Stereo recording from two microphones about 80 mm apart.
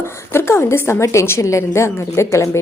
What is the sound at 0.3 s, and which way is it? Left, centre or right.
Speech, left.